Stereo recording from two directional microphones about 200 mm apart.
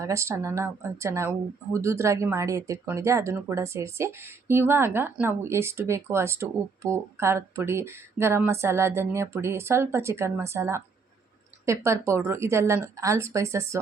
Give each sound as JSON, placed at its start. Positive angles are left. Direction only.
{"t": 0.0, "sound": "speech", "side_deg": -15}